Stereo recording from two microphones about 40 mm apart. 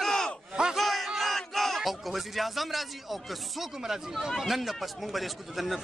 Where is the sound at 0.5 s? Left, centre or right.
Centre.